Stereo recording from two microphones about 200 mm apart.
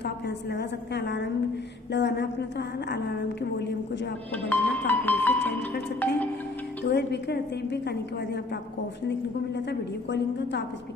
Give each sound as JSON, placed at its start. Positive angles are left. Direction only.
{"t": 0.0, "sound": "a woman's voice", "side_deg": 55}
{"t": 4.5, "sound": "speech", "side_deg": 10}
{"t": 6.9, "sound": "a woman's voice", "side_deg": 55}
{"t": 9.7, "sound": "a woman's voice", "side_deg": 60}